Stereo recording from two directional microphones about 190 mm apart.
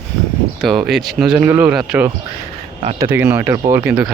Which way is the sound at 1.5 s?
10° right (ahead or behind).